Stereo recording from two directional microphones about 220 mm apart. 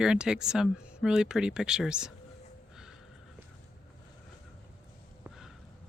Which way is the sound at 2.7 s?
Centre (ahead or behind).